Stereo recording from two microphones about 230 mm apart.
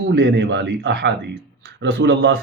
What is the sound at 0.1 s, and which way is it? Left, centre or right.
Speech, right.